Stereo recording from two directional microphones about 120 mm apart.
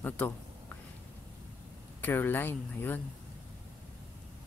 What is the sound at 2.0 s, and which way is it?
Speech, 15° left (ahead or behind).